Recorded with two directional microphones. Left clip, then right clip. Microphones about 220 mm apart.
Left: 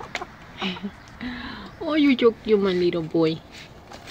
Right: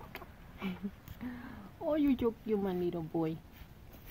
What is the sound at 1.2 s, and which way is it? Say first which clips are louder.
Speech: left 13 dB; 5° right (ahead or behind).